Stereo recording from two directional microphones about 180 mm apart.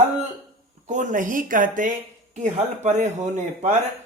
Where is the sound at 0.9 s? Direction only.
45° right (ahead or behind).